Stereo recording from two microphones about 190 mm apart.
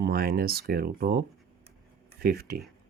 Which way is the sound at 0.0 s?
50° right (ahead or behind).